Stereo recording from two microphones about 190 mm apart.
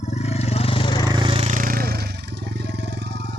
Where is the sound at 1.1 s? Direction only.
25° right (ahead or behind).